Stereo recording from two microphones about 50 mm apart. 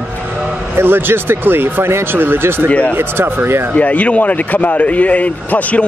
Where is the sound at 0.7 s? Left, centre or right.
Right.